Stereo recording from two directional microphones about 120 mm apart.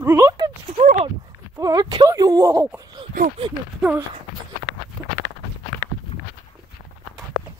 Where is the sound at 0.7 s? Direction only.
75° right (ahead or behind).